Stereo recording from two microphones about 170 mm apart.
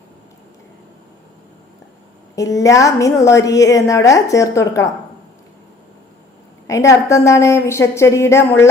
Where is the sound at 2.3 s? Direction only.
20° left (ahead or behind).